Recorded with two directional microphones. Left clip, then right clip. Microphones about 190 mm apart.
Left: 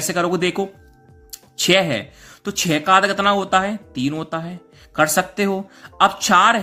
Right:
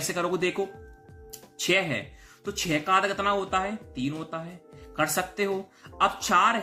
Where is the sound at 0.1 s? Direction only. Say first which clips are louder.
Left 8 dB; 40° left (ahead or behind).